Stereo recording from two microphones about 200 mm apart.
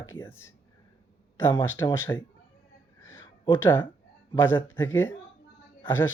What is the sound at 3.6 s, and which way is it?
Speech, 10° left (ahead or behind).